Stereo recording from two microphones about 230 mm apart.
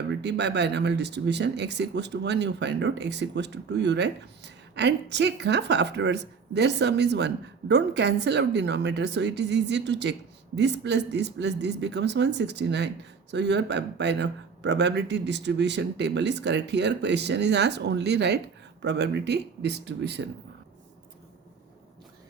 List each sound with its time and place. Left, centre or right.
0.1 s speech: right